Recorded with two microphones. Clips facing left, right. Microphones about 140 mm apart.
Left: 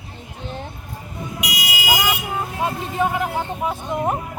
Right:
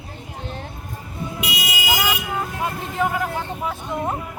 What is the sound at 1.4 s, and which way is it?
Vehicle, 25° right (ahead or behind).